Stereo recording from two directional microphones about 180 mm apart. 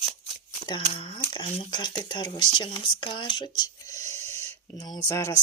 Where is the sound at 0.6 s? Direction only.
25° left (ahead or behind).